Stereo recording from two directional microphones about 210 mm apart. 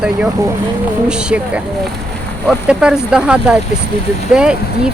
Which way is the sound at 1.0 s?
5° right (ahead or behind).